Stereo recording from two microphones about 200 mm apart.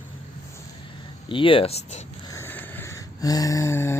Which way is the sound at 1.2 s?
25° left (ahead or behind).